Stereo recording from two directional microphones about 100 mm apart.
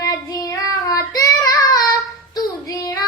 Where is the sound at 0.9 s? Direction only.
40° left (ahead or behind).